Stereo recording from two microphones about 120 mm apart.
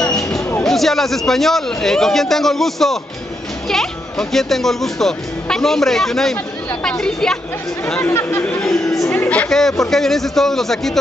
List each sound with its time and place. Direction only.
0.0 s music: 5° left (ahead or behind)
0.4 s music: 20° left (ahead or behind)
0.7 s speech: centre (ahead or behind)
8.1 s speech: 20° left (ahead or behind)
9.1 s speech: 15° left (ahead or behind)